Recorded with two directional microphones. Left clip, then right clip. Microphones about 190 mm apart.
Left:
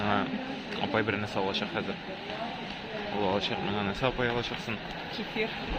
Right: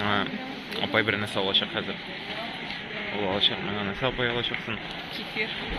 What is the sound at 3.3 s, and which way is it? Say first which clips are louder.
Speech: right 5 dB; 10° left (ahead or behind).